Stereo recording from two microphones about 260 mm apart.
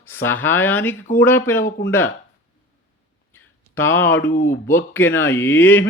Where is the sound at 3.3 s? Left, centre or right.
Centre.